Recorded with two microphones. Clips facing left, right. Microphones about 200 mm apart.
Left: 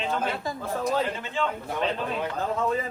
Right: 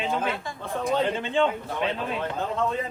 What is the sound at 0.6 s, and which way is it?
Speech, centre (ahead or behind).